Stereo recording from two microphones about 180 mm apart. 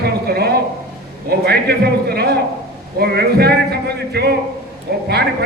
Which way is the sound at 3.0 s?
65° right (ahead or behind).